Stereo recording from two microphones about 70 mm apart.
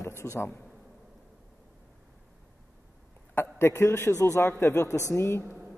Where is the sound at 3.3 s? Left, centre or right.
Left.